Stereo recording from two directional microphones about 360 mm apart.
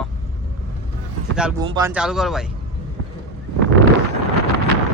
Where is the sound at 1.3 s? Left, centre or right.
Centre.